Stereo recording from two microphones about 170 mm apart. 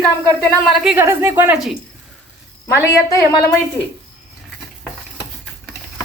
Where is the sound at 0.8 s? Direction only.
10° right (ahead or behind).